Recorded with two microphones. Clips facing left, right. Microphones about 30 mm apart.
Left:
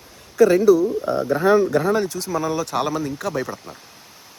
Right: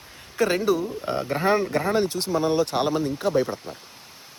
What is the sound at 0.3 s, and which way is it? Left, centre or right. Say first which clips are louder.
Speech: left 8 dB; right.